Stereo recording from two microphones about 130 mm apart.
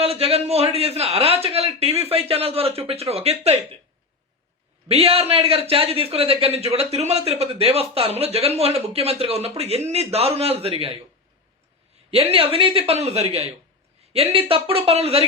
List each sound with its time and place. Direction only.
0.0 s a man's voice: 50° right (ahead or behind)
4.9 s a man's voice: 50° right (ahead or behind)
12.1 s a man's voice: 50° right (ahead or behind)